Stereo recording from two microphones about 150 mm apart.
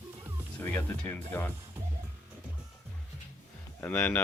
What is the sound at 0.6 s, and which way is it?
Speech, 15° left (ahead or behind).